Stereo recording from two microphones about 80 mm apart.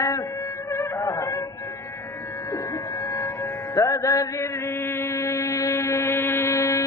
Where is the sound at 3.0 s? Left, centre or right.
Left.